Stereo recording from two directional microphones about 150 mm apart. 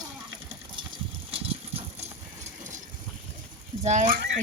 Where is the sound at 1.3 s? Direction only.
40° right (ahead or behind).